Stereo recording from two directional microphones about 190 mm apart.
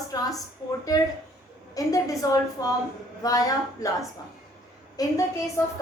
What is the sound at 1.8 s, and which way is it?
A woman's voice, 20° left (ahead or behind).